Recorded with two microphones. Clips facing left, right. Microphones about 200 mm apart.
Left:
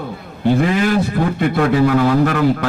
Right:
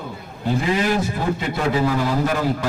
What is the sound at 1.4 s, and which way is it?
A man's voice, 60° left (ahead or behind).